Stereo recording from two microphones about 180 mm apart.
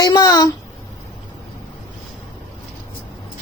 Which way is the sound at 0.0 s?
20° left (ahead or behind).